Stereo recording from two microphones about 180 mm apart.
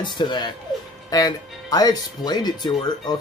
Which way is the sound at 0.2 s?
25° left (ahead or behind).